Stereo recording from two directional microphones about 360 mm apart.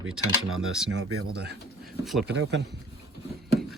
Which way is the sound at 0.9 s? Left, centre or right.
Right.